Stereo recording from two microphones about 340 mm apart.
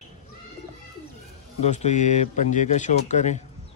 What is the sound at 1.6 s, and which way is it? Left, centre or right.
A man's voice, centre.